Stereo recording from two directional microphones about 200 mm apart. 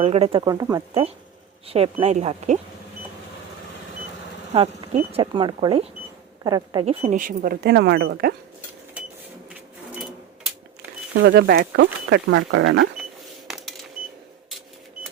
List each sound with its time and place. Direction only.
0.0 s speech: 30° right (ahead or behind)
1.6 s speech: 30° right (ahead or behind)
4.9 s speech: 30° right (ahead or behind)
6.8 s speech: 30° right (ahead or behind); by 8.3 s 55° right (ahead or behind)
11.1 s speech: 55° right (ahead or behind)
12.0 s speech: 70° right (ahead or behind)
13.5 s a sound: centre (ahead or behind)